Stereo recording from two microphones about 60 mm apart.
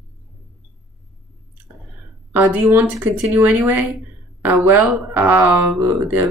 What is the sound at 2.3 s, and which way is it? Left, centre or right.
Speech, right.